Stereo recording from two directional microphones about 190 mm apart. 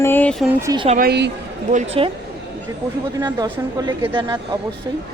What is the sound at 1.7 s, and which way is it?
Speech, 35° right (ahead or behind).